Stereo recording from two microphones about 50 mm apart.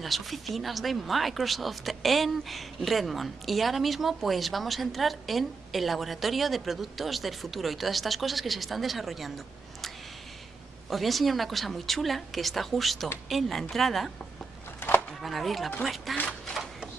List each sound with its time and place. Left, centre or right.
0.0 s speech: centre
10.9 s speech: centre
15.2 s speech: centre